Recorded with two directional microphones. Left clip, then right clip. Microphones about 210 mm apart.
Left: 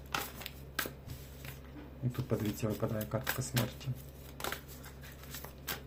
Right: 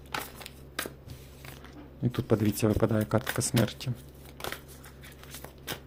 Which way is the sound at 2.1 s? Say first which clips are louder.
Right 9 dB; 45° right (ahead or behind).